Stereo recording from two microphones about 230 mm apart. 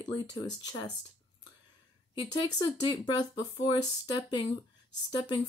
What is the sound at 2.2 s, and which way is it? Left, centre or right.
Speech, centre.